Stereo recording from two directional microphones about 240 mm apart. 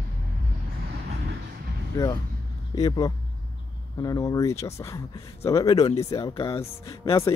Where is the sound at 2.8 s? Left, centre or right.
Centre.